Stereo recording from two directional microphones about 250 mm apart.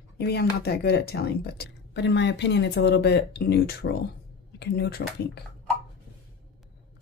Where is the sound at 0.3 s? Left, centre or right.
Left.